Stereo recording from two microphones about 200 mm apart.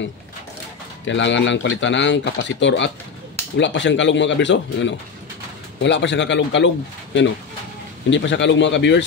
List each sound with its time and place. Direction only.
1.0 s speech: 65° left (ahead or behind)
8.1 s speech: 65° left (ahead or behind)